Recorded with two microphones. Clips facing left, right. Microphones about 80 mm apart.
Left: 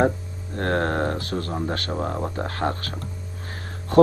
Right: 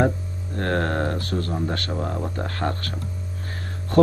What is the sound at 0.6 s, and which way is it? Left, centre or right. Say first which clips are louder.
Speech: left 1 dB; left.